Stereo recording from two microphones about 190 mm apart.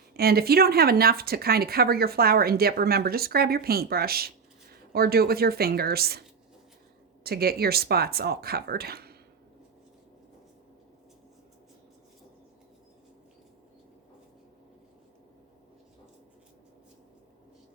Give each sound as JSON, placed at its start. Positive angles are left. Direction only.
{"t": 0.1, "sound": "speech", "side_deg": -55}
{"t": 7.3, "sound": "speech", "side_deg": -55}